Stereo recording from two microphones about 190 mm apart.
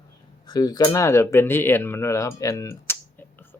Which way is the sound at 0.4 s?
20° left (ahead or behind).